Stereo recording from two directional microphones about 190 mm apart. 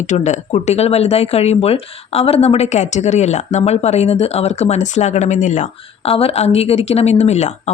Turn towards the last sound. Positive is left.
turn(degrees=35)  # may be behind; listen again after turning